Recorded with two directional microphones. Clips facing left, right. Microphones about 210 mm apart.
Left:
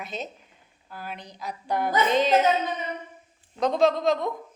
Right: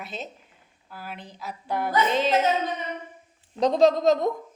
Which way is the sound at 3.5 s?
35° right (ahead or behind).